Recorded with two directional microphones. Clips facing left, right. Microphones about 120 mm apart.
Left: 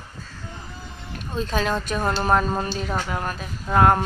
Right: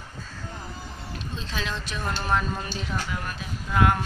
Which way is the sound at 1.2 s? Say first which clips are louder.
Left 10 dB; 50° left (ahead or behind).